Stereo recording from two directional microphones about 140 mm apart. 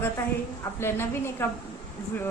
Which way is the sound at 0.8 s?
15° left (ahead or behind).